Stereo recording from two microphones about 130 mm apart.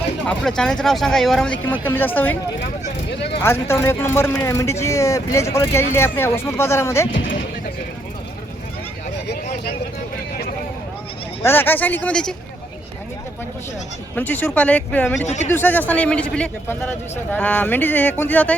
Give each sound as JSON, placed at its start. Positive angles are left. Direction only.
{"t": 0.3, "sound": "speech", "side_deg": 5}
{"t": 1.8, "sound": "speech", "side_deg": 15}
{"t": 3.4, "sound": "speech", "side_deg": 20}
{"t": 11.4, "sound": "speech", "side_deg": 15}
{"t": 14.2, "sound": "speech", "side_deg": 15}